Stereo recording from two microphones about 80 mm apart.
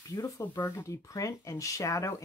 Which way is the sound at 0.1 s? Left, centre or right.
Left.